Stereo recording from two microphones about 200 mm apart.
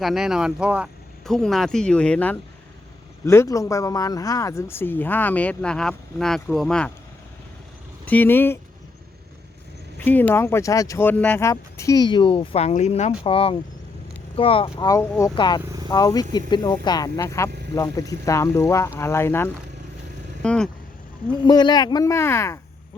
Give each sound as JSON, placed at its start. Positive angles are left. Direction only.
{"t": 0.0, "sound": "speech", "side_deg": 0}
{"t": 8.0, "sound": "speech", "side_deg": 10}
{"t": 10.0, "sound": "speech", "side_deg": 10}
{"t": 15.6, "sound": "speech", "side_deg": -20}
{"t": 15.9, "sound": "speech", "side_deg": 20}
{"t": 21.4, "sound": "speech", "side_deg": 20}